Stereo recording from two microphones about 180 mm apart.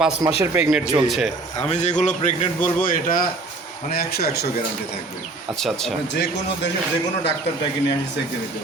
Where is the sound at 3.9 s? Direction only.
60° left (ahead or behind).